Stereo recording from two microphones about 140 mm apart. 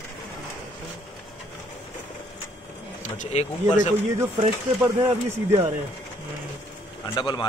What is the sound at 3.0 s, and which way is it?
Speech, 55° left (ahead or behind).